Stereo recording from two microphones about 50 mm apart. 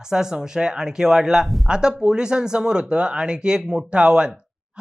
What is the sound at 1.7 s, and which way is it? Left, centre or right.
Speech, centre.